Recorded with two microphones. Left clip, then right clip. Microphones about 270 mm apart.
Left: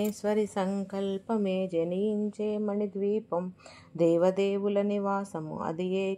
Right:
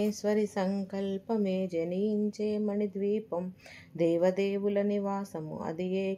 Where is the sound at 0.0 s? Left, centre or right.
Left.